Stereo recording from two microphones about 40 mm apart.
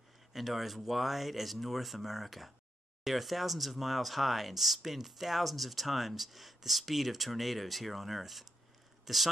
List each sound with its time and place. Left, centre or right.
0.3 s speech: centre